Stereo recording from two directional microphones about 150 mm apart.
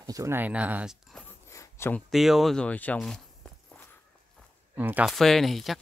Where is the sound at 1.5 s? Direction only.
20° left (ahead or behind).